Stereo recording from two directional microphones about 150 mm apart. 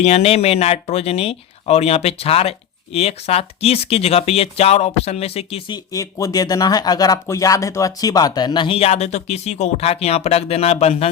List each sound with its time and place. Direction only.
0.0 s speech: 45° left (ahead or behind)